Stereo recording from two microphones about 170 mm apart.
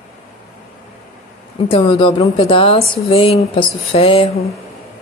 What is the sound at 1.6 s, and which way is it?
A woman's voice, 30° left (ahead or behind).